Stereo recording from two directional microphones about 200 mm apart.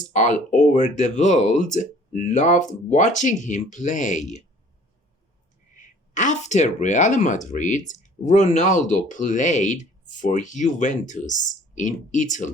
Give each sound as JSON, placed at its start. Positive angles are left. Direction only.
{"t": 0.1, "sound": "speech", "side_deg": 40}
{"t": 5.7, "sound": "speech", "side_deg": 40}